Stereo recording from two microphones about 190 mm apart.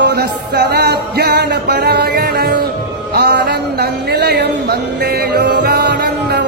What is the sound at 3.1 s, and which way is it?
A man's voice, 60° right (ahead or behind).